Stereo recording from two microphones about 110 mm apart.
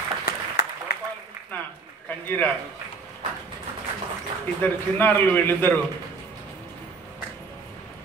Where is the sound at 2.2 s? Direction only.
15° left (ahead or behind).